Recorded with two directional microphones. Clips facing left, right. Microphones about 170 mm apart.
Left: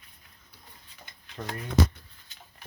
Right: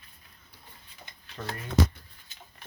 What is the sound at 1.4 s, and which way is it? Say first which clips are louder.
Speech: even; 20° left (ahead or behind).